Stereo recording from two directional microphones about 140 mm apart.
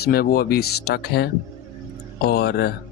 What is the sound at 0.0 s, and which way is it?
Speech, 90° left.